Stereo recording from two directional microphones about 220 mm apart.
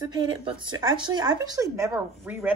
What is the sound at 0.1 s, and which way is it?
Speech, 20° right (ahead or behind).